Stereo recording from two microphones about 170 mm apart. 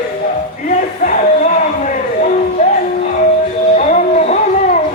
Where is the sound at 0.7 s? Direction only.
45° left (ahead or behind).